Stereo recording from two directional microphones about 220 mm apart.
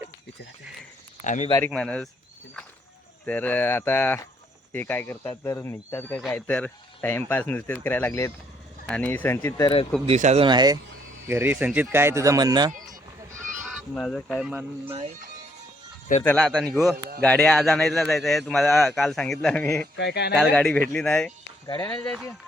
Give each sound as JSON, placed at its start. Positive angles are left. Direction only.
{"t": 1.2, "sound": "speech", "side_deg": 35}
{"t": 1.6, "sound": "a man's voice", "side_deg": 5}
{"t": 3.2, "sound": "speech", "side_deg": 5}
{"t": 10.1, "sound": "speech", "side_deg": -30}
{"t": 13.6, "sound": "speech", "side_deg": 0}
{"t": 14.8, "sound": "speech", "side_deg": -25}
{"t": 16.2, "sound": "a man's voice", "side_deg": 5}
{"t": 20.0, "sound": "speech", "side_deg": 50}
{"t": 20.3, "sound": "a man's voice", "side_deg": 0}
{"t": 21.7, "sound": "speech", "side_deg": 15}
{"t": 21.9, "sound": "a man's voice", "side_deg": 5}